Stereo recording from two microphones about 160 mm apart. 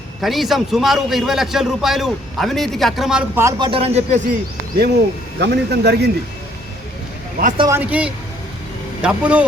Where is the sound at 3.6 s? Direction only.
30° right (ahead or behind).